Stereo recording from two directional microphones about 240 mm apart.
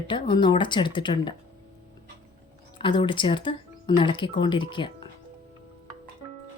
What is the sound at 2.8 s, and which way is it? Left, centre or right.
Speech, left.